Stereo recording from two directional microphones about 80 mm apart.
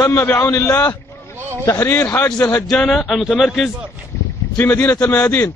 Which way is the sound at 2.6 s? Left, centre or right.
Centre.